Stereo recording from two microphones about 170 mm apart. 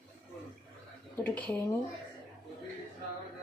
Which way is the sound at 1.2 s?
10° left (ahead or behind).